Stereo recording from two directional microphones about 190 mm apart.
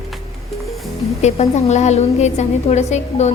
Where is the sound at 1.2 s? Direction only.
35° left (ahead or behind).